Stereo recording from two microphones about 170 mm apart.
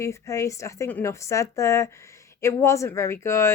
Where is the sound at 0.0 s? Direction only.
15° left (ahead or behind).